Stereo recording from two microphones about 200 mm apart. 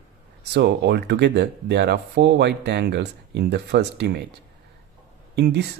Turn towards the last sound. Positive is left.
turn(degrees=-55)  # may be behind; listen again after turning